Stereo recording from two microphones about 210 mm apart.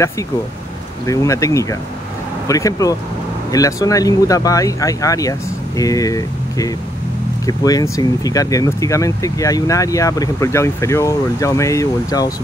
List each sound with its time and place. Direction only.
1.0 s speech: 15° left (ahead or behind)